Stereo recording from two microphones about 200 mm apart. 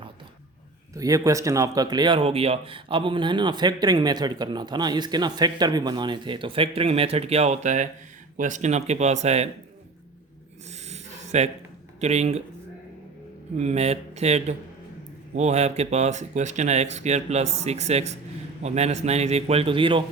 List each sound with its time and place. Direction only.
0.9 s speech: 15° right (ahead or behind); by 9.5 s 35° right (ahead or behind)
10.7 s a sound: 35° right (ahead or behind)
11.9 s speech: 35° right (ahead or behind)
13.6 s speech: 35° right (ahead or behind)